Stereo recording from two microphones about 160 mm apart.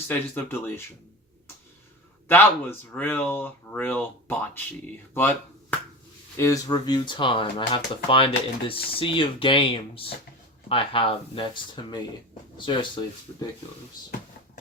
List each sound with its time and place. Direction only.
0.1 s speech: 15° left (ahead or behind)
2.2 s speech: 15° left (ahead or behind)
6.3 s speech: 20° left (ahead or behind)